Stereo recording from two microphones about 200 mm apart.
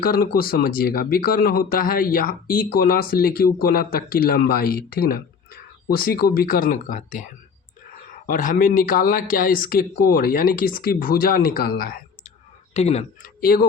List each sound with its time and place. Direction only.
0.0 s speech: 50° left (ahead or behind)
8.3 s speech: 45° left (ahead or behind)
12.7 s speech: 30° left (ahead or behind)
13.4 s speech: 50° left (ahead or behind)